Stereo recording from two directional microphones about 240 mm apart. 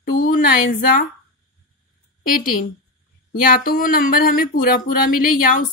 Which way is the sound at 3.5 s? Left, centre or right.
Left.